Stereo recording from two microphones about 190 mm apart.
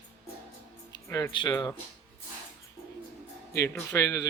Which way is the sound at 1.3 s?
25° left (ahead or behind).